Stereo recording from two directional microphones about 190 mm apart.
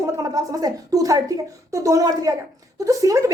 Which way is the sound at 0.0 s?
15° right (ahead or behind).